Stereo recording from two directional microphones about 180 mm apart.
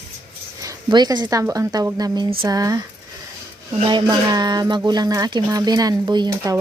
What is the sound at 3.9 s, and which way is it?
Speech, 25° right (ahead or behind).